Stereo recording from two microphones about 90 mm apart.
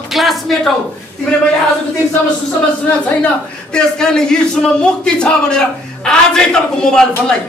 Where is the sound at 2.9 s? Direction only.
15° left (ahead or behind).